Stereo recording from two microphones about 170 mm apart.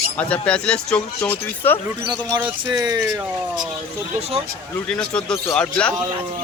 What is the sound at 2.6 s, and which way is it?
Speech, 25° right (ahead or behind).